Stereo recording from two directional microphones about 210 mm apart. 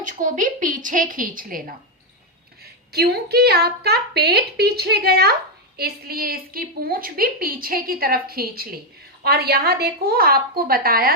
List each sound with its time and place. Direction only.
0.0 s a woman's voice: 35° right (ahead or behind)
2.9 s a woman's voice: 50° right (ahead or behind)